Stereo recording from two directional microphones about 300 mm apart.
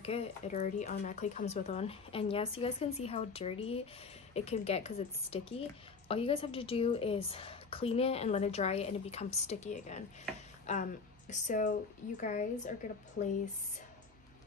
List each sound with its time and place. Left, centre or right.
0.0 s a woman's voice: centre